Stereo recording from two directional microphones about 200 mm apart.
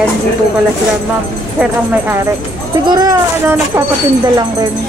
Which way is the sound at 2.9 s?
20° right (ahead or behind).